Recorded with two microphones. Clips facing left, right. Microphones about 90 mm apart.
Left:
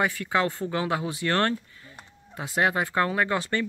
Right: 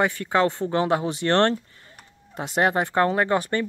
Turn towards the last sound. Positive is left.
turn(degrees=-30)  # may be behind; listen again after turning